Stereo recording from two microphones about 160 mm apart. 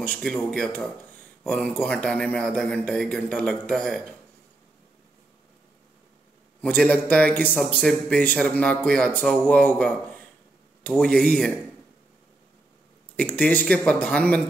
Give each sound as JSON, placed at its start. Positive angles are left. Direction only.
{"t": 0.0, "sound": "a man's voice", "side_deg": 5}
{"t": 6.6, "sound": "a man's voice", "side_deg": 5}
{"t": 13.1, "sound": "a man's voice", "side_deg": 10}